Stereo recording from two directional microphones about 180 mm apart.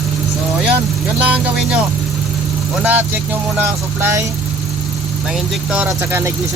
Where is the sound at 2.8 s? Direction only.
10° right (ahead or behind).